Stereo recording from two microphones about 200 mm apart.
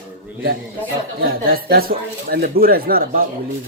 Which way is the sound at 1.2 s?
50° right (ahead or behind).